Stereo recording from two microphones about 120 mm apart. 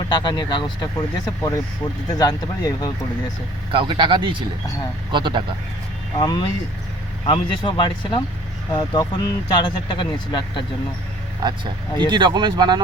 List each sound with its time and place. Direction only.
0.1 s speech: 40° left (ahead or behind)
1.4 s speech: 25° left (ahead or behind)
3.7 s speech: 45° right (ahead or behind)
6.1 s speech: 35° left (ahead or behind)
11.4 s speech: 40° right (ahead or behind)